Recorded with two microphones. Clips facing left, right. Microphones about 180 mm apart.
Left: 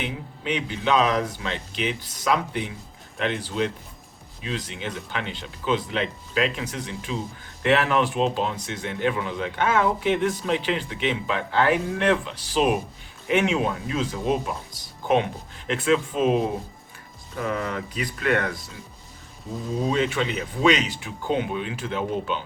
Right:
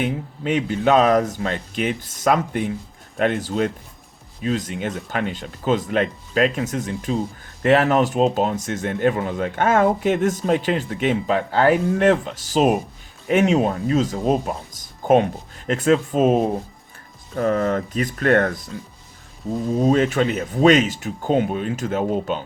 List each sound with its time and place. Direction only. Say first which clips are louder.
0.0 s speech: right 7 dB; 45° right (ahead or behind)
19.9 s speech: right 5 dB; 45° right (ahead or behind)